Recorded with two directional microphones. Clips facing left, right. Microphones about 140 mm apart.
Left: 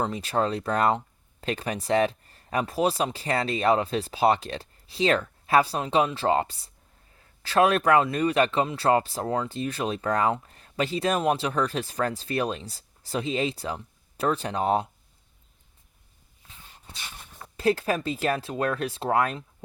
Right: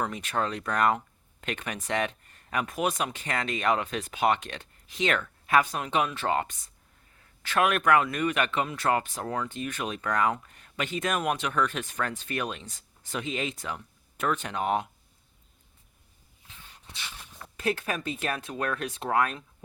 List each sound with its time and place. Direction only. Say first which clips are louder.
0.0 s speech: left 4 dB; 30° left (ahead or behind)
16.5 s dog: left 2 dB; 35° left (ahead or behind)
17.6 s speech: left 6 dB; 30° left (ahead or behind)